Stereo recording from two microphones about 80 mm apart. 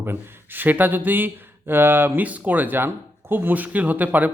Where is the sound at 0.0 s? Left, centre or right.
Right.